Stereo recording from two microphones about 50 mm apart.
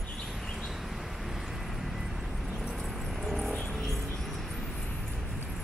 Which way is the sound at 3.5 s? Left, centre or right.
Left.